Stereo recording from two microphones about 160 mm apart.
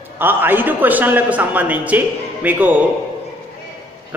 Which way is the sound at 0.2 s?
10° right (ahead or behind).